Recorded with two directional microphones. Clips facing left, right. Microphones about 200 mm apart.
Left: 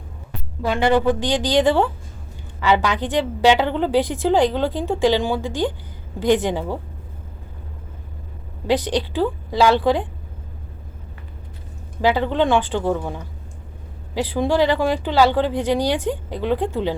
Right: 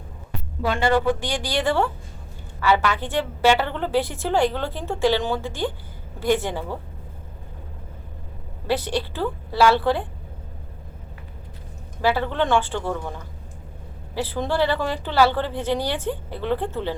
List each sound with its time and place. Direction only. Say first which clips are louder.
0.8 s a woman's voice: left 4 dB; 15° left (ahead or behind)
8.6 s a woman's voice: left 4 dB; 15° left (ahead or behind)
12.0 s a woman's voice: left 4 dB; 15° left (ahead or behind)